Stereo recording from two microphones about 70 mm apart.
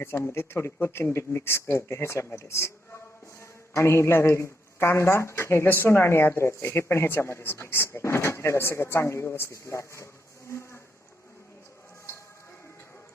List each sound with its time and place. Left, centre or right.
0.0 s speech: left
10.5 s insect: left